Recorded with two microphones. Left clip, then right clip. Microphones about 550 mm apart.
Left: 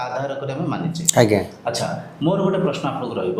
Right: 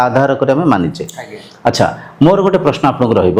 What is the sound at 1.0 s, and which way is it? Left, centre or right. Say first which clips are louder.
Speech: left 12 dB; left.